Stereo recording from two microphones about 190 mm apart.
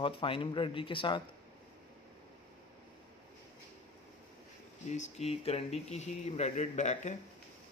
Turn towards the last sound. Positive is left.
turn(degrees=40)  # may be behind; listen again after turning